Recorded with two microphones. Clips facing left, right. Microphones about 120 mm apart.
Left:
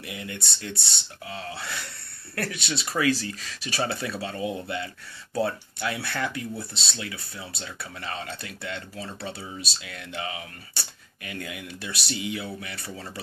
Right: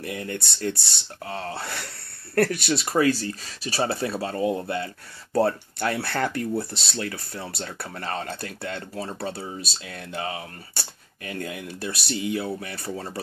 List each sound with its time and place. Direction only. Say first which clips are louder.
0.0 s speech: right 5 dB; 40° right (ahead or behind)
3.0 s speech: right 2 dB; 40° right (ahead or behind)
5.3 s speech: right 5 dB; 50° right (ahead or behind)